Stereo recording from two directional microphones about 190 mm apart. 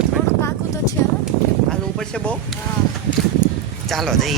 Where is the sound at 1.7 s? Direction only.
5° left (ahead or behind).